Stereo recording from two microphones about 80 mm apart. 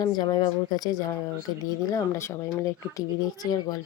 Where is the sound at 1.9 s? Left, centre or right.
Left.